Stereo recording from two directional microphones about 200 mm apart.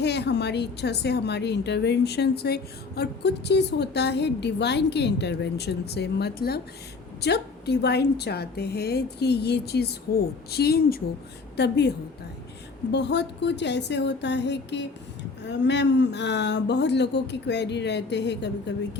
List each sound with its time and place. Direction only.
0.0 s a woman's voice: 55° left (ahead or behind)
12.9 s a woman's voice: 60° left (ahead or behind)